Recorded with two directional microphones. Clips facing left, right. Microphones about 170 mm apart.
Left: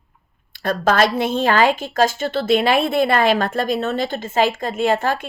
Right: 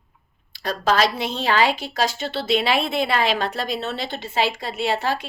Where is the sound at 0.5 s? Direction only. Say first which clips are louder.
Left 3 dB; 50° left (ahead or behind).